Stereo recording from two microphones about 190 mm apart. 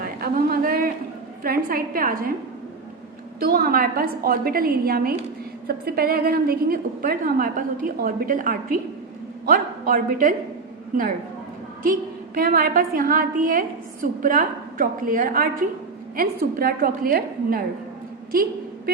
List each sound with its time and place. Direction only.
0.0 s a sound: 50° right (ahead or behind)
1.5 s a woman's voice: 50° right (ahead or behind)
3.4 s a woman's voice: 50° right (ahead or behind)
11.9 s a woman's voice: 50° right (ahead or behind)